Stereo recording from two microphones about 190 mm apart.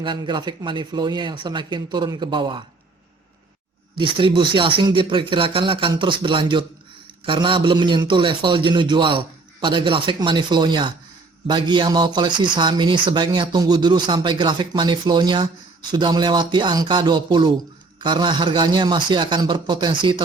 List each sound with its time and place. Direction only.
0.0 s a man's voice: 25° right (ahead or behind)
3.9 s a man's voice: 25° right (ahead or behind)